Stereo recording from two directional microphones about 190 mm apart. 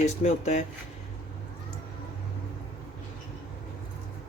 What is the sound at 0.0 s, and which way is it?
Speech, 35° left (ahead or behind).